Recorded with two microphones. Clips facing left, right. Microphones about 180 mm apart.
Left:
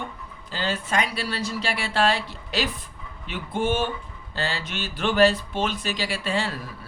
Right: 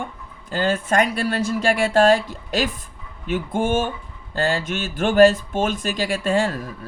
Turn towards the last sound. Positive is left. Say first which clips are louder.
# right 7 dB
turn(degrees=-45)  # may be behind; listen again after turning